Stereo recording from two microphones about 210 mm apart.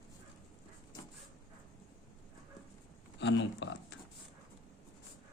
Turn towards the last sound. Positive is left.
turn(degrees=60)  # may be behind; listen again after turning